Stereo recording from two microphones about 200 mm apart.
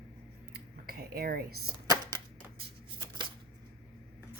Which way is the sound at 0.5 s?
50° right (ahead or behind).